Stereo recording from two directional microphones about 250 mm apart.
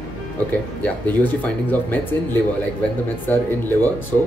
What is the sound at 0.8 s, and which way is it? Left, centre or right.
Speech, centre.